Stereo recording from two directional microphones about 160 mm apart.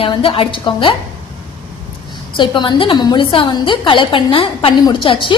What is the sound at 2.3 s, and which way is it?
A woman's voice, 30° left (ahead or behind).